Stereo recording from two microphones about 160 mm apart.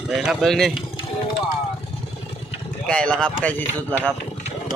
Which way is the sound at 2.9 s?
5° left (ahead or behind).